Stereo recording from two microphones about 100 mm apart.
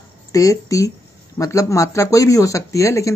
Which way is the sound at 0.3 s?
35° left (ahead or behind).